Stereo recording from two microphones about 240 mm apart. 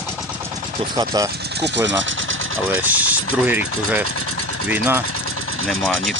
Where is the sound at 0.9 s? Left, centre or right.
Centre.